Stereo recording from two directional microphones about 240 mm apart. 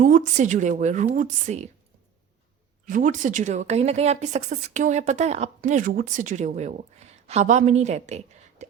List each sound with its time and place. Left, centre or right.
0.0 s speech: right
2.8 s a woman's voice: right